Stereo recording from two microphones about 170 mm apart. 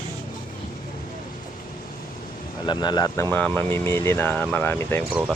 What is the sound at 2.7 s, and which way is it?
Speech, 25° left (ahead or behind).